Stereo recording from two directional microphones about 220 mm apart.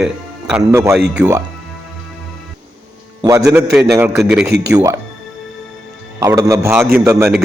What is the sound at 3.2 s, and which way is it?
Speech, 15° right (ahead or behind).